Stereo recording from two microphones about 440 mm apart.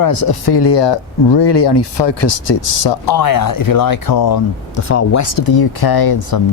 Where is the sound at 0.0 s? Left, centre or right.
Left.